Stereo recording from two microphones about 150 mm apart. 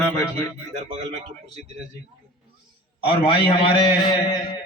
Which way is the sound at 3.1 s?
35° left (ahead or behind).